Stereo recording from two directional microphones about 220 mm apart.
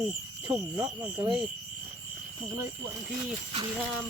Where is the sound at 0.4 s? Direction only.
10° right (ahead or behind).